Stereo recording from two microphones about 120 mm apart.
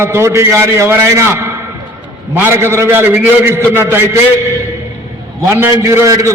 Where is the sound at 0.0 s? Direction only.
20° right (ahead or behind).